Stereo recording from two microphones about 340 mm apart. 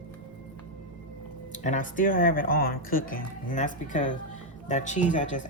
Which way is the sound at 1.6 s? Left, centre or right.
Left.